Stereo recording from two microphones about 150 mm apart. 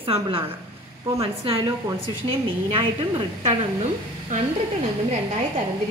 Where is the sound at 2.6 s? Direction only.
40° right (ahead or behind).